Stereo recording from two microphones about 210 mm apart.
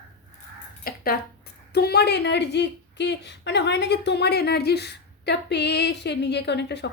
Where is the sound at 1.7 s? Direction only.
50° left (ahead or behind).